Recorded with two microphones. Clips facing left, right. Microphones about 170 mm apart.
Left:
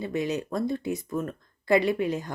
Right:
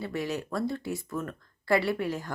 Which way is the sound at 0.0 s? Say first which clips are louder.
Left 4 dB; 20° left (ahead or behind).